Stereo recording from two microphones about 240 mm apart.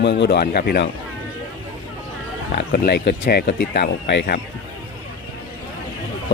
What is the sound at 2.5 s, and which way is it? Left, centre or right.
Speech, left.